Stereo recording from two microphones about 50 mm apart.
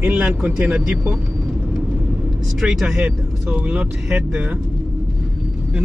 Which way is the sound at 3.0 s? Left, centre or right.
Right.